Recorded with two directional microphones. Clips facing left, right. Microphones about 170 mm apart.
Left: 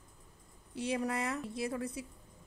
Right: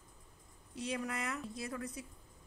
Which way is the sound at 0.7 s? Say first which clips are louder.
Left 5 dB; 30° left (ahead or behind).